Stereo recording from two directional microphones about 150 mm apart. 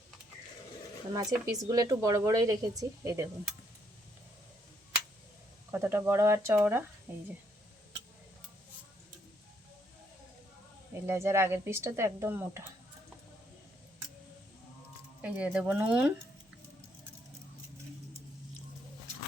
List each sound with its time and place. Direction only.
1.1 s speech: 25° right (ahead or behind)
5.7 s a woman's voice: 15° right (ahead or behind)
11.0 s a woman's voice: 20° right (ahead or behind)
15.2 s a woman's voice: 10° right (ahead or behind)